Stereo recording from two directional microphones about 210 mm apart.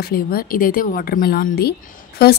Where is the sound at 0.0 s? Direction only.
45° left (ahead or behind).